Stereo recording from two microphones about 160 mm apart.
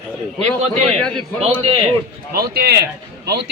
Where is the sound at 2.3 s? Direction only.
70° right (ahead or behind).